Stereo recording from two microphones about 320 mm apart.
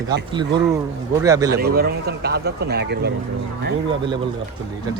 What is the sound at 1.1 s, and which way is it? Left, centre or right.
Speech, centre.